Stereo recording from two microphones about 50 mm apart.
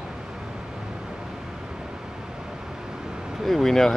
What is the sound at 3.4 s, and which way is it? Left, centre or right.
Speech, centre.